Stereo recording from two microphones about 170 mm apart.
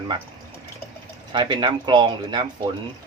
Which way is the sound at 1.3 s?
25° right (ahead or behind).